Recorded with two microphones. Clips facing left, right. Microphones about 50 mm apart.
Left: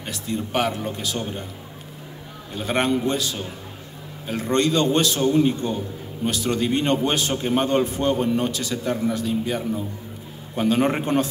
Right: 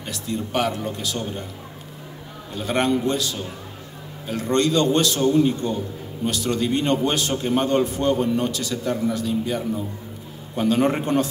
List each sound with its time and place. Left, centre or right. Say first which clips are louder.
0.0 s a man's voice: even; left
2.5 s a man's voice: right 1 dB; left